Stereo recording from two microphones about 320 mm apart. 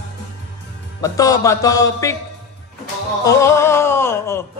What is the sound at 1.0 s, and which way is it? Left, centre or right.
Speech, centre.